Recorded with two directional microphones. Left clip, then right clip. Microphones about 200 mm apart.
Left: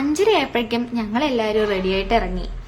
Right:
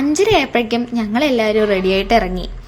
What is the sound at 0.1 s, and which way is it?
A woman's voice, 20° right (ahead or behind).